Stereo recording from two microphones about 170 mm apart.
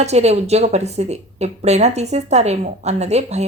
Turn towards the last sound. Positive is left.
turn(degrees=-40)  # may be behind; listen again after turning